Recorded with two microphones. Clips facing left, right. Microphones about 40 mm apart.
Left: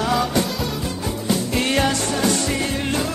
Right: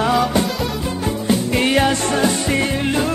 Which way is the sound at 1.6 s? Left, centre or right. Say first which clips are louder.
Right 3 dB; centre.